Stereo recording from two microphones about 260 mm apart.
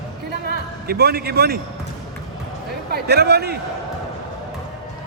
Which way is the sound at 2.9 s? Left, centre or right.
Right.